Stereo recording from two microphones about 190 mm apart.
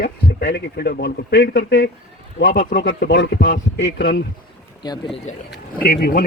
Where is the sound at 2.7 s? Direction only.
70° left (ahead or behind).